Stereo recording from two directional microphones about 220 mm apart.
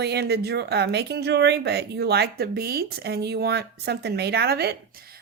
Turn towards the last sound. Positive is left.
turn(degrees=-45)  # may be behind; listen again after turning